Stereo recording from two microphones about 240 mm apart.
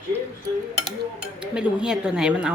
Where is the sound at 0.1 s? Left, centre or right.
Centre.